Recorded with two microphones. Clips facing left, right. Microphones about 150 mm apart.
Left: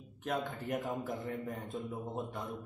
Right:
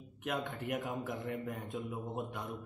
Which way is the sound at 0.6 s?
30° left (ahead or behind).